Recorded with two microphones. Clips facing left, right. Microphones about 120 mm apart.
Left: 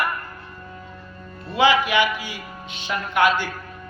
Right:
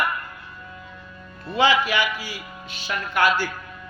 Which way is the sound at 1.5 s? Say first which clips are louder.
Left 2 dB; 15° left (ahead or behind).